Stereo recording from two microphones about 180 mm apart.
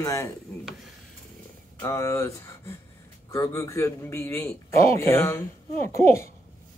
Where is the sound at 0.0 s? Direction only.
15° left (ahead or behind).